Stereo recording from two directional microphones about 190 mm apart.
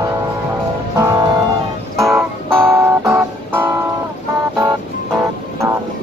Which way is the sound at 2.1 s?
10° right (ahead or behind).